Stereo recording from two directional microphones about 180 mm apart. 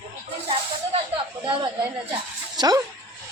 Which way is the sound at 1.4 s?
30° right (ahead or behind).